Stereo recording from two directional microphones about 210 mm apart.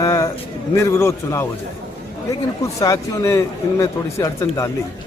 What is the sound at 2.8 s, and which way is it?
A man's voice, 15° left (ahead or behind).